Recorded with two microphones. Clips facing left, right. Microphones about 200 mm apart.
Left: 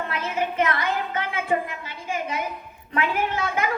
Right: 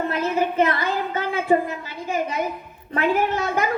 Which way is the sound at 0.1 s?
35° right (ahead or behind).